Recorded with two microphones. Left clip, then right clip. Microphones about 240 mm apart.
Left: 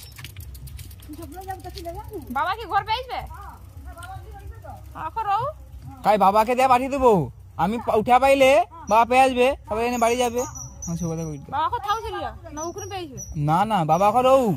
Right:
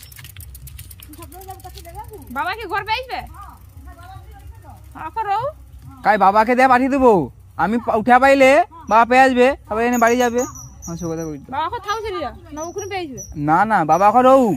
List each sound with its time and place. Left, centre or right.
2.3 s speech: left
4.9 s speech: left